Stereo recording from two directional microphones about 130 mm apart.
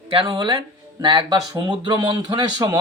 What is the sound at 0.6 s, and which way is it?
Speech, 40° right (ahead or behind).